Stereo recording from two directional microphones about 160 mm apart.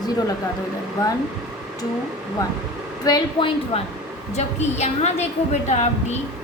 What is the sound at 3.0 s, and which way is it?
Speech, 30° left (ahead or behind).